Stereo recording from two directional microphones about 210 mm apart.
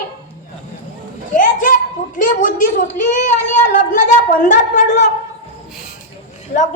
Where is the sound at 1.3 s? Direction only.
40° left (ahead or behind).